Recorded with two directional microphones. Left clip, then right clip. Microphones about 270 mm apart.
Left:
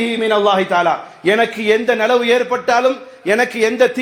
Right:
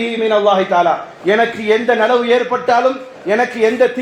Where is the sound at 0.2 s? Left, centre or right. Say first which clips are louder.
Right 2 dB; left.